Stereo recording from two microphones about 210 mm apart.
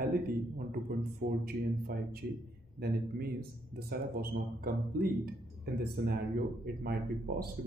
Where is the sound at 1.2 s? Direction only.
45° right (ahead or behind).